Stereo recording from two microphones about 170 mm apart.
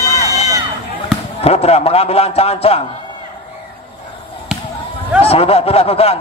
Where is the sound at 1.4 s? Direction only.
35° left (ahead or behind).